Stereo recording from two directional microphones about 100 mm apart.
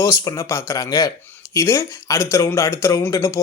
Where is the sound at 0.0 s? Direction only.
35° left (ahead or behind).